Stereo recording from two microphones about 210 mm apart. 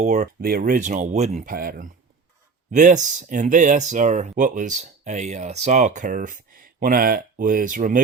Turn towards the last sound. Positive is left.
turn(degrees=-40)  # may be behind; listen again after turning